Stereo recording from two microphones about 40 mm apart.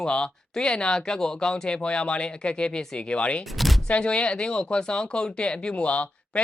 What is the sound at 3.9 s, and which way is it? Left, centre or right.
Speech, left.